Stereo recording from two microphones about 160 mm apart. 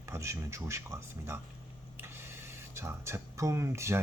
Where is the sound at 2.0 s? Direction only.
15° right (ahead or behind).